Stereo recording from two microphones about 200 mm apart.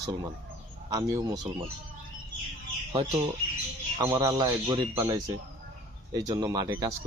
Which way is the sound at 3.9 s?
15° right (ahead or behind).